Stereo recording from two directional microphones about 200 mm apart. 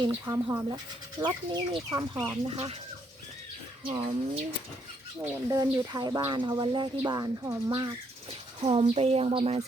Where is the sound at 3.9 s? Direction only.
30° right (ahead or behind).